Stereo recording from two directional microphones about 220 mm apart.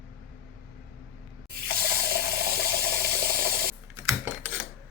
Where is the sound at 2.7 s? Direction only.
45° right (ahead or behind).